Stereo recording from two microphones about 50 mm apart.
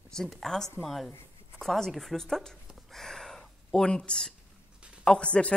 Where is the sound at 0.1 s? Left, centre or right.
Centre.